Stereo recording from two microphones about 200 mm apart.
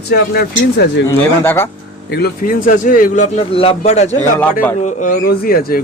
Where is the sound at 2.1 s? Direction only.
50° left (ahead or behind).